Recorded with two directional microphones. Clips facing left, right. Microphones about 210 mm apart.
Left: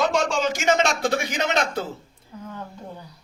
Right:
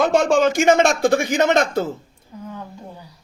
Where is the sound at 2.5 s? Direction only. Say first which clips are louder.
Right 1 dB; 10° right (ahead or behind).